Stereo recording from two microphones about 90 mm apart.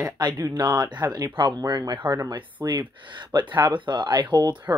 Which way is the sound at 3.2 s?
60° right (ahead or behind).